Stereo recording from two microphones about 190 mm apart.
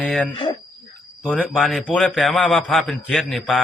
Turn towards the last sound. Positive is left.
turn(degrees=0)  # may be behind; listen again after turning